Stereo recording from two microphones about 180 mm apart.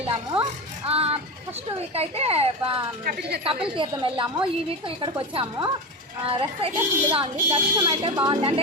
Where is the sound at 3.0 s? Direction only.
60° right (ahead or behind).